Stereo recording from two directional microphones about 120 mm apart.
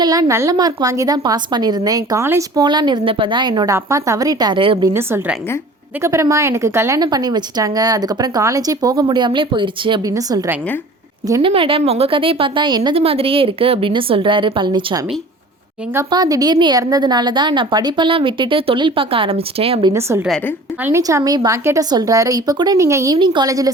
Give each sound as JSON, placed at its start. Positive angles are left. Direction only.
{"t": 0.0, "sound": "a woman's voice", "side_deg": -30}
{"t": 2.6, "sound": "a woman's voice", "side_deg": -35}
{"t": 6.0, "sound": "speech", "side_deg": -25}
{"t": 7.0, "sound": "a woman's voice", "side_deg": -35}
{"t": 10.1, "sound": "speech", "side_deg": -30}
{"t": 11.4, "sound": "a woman's voice", "side_deg": -50}
{"t": 13.0, "sound": "a woman's voice", "side_deg": -55}
{"t": 16.0, "sound": "a woman's voice", "side_deg": -35}
{"t": 19.9, "sound": "speech", "side_deg": -20}
{"t": 23.1, "sound": "a woman's voice", "side_deg": -40}
{"t": 23.5, "sound": "speech", "side_deg": -30}